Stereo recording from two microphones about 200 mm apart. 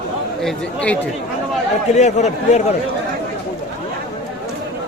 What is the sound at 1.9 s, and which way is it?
Speech, 35° left (ahead or behind).